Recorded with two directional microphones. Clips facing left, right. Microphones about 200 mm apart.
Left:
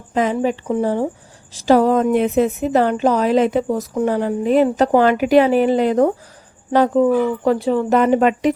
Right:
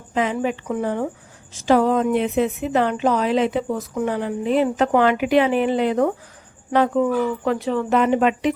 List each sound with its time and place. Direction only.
0.1 s a woman's voice: 40° left (ahead or behind)